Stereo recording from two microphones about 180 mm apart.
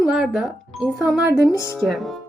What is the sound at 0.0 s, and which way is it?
Speech, 5° right (ahead or behind).